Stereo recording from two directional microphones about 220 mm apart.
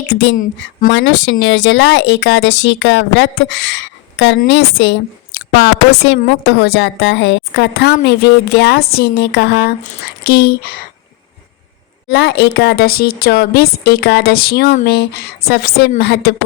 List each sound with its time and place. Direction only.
0.9 s a woman's voice: 55° left (ahead or behind)
12.0 s speech: 50° left (ahead or behind)